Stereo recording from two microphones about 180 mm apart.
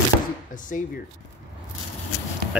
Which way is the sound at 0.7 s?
50° left (ahead or behind).